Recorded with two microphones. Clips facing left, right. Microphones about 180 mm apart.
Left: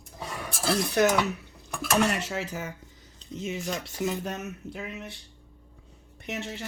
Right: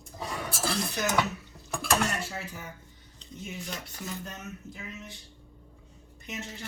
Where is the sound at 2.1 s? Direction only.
90° left; by 5.1 s 65° left (ahead or behind).